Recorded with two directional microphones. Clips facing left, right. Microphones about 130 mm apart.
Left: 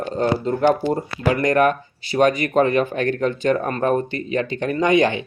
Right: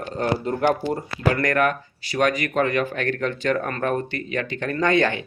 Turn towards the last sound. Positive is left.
turn(degrees=15)  # may be behind; listen again after turning